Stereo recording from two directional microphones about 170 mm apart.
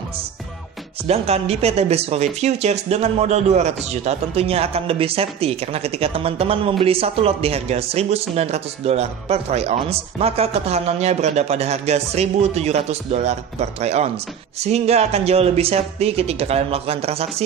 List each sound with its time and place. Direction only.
1.0 s speech: 35° right (ahead or behind)